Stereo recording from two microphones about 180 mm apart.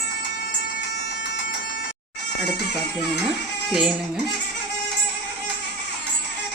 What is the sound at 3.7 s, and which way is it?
Speech, 5° right (ahead or behind).